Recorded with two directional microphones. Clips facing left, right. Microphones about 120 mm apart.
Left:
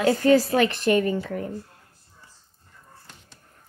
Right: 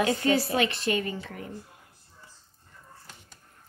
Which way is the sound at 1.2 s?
40° left (ahead or behind).